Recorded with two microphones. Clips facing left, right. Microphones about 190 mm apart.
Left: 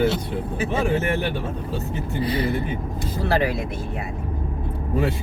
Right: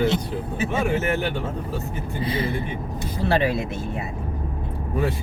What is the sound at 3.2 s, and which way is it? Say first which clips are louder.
Speech: right 1 dB; 25° right (ahead or behind).